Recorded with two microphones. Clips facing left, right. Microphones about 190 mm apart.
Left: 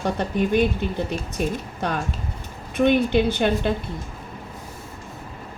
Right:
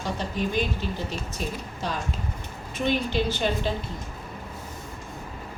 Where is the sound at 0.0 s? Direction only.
60° left (ahead or behind).